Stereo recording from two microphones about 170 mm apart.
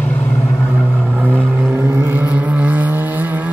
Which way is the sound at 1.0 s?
10° right (ahead or behind).